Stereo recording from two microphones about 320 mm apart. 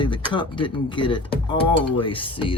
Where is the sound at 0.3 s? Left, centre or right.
Centre.